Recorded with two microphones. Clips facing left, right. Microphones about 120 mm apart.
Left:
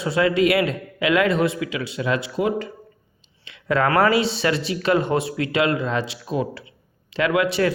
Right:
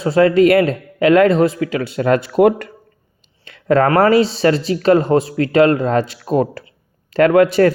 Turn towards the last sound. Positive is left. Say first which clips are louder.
# right 9 dB
turn(degrees=-45)  # may be behind; listen again after turning